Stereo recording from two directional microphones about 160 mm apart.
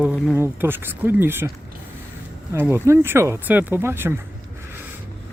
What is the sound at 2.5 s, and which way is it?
Speech, 15° right (ahead or behind).